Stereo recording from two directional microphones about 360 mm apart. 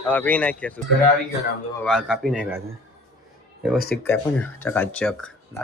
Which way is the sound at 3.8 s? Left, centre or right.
Left.